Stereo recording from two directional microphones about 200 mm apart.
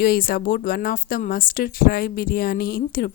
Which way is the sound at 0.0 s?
50° left (ahead or behind).